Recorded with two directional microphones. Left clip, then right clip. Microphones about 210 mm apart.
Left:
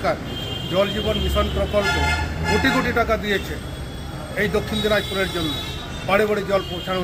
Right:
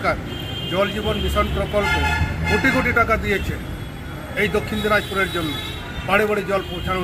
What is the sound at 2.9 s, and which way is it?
Speech, 15° left (ahead or behind).